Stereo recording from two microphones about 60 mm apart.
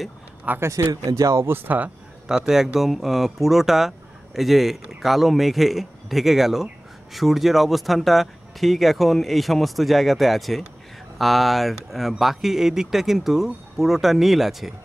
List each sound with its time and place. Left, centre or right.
0.6 s speech: right
1.5 s speech: right
2.2 s speech: centre